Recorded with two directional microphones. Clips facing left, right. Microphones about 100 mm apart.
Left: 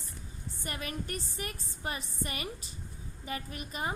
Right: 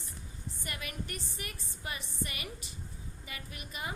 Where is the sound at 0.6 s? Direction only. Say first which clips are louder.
Left 4 dB; 35° left (ahead or behind).